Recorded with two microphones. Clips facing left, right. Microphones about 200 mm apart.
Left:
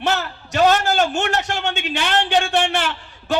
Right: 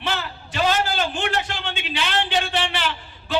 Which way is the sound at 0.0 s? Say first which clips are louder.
Left 6 dB; 45° left (ahead or behind).